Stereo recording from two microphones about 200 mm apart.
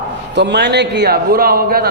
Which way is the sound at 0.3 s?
60° right (ahead or behind).